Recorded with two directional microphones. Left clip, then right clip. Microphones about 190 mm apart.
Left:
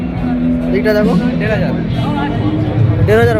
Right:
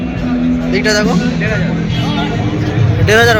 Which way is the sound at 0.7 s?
25° left (ahead or behind).